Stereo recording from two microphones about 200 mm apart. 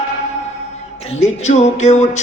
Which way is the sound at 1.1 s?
35° left (ahead or behind).